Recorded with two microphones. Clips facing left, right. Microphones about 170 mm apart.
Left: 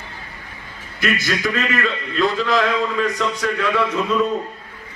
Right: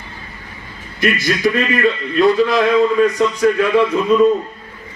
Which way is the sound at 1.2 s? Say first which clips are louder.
Right 5 dB; 20° right (ahead or behind).